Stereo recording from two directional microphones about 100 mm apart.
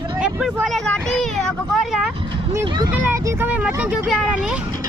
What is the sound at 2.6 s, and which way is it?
Speech, 50° right (ahead or behind).